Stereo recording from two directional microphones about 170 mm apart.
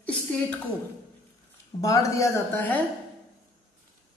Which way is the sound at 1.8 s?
20° left (ahead or behind).